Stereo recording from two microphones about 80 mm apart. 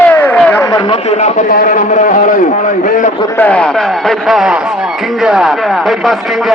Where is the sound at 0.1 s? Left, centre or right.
Left.